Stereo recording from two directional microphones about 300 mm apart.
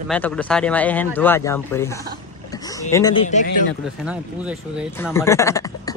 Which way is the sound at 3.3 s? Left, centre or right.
Left.